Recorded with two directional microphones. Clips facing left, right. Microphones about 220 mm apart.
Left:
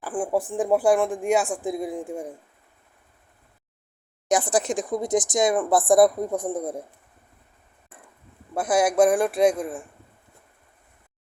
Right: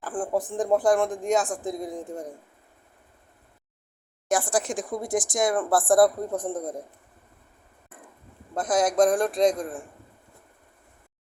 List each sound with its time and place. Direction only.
0.0 s speech: 10° left (ahead or behind)
4.3 s speech: 20° left (ahead or behind)
8.5 s speech: 10° left (ahead or behind)